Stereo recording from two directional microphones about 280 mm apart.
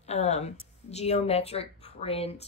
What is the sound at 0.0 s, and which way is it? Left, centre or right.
Speech, left.